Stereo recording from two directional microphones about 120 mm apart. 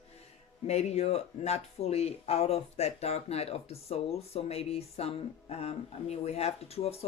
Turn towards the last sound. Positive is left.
turn(degrees=60)  # may be behind; listen again after turning